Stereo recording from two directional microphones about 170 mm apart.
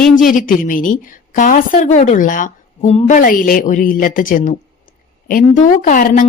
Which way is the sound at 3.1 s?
55° left (ahead or behind).